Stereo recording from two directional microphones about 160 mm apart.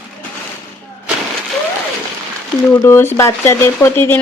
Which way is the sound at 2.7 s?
15° left (ahead or behind).